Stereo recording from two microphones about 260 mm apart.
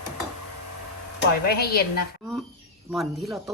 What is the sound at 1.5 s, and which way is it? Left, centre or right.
Speech, left.